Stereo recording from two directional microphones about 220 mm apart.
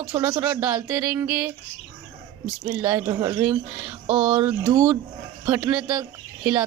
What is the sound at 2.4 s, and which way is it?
Speech, 10° right (ahead or behind).